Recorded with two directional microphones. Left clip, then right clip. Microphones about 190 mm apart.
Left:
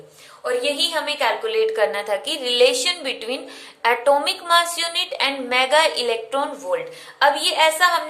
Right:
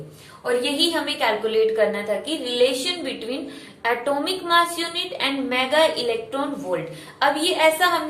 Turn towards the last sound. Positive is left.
turn(degrees=30)  # may be behind; listen again after turning